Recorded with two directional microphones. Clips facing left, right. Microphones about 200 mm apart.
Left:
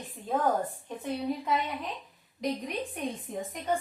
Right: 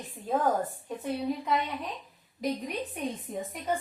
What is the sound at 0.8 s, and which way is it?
A woman's voice, centre (ahead or behind).